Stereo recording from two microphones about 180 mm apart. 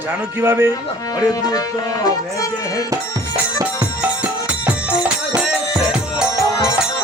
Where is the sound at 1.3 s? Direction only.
20° left (ahead or behind).